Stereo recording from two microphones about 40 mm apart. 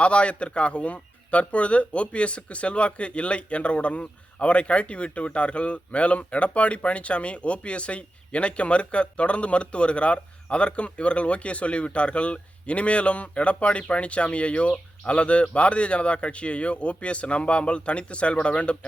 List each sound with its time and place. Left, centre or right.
0.0 s speech: left